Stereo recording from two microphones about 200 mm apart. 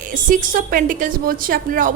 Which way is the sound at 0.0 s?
40° right (ahead or behind).